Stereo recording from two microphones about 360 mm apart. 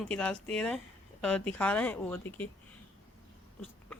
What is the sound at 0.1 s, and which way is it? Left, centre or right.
Speech, centre.